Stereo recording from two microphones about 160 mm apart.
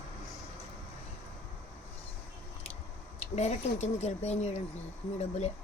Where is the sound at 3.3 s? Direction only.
45° left (ahead or behind).